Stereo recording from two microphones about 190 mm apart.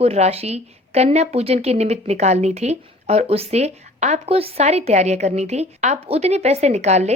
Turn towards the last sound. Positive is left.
turn(degrees=-35)  # may be behind; listen again after turning